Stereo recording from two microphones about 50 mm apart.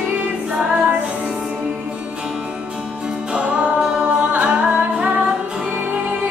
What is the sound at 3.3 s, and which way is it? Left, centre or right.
Music, right.